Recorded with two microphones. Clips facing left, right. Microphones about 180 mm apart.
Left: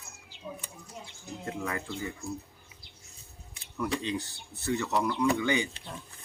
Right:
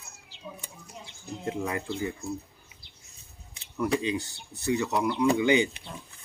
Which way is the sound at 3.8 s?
10° right (ahead or behind).